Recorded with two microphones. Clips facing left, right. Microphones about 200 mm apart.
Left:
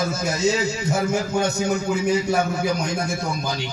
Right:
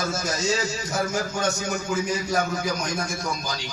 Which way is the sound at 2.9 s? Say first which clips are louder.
Left 3 dB; 60° left (ahead or behind).